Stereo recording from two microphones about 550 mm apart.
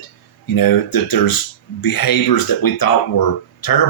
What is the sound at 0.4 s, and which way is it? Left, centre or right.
Speech, left.